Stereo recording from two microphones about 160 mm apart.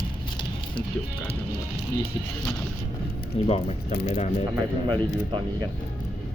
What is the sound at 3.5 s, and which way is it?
Speech, 40° left (ahead or behind).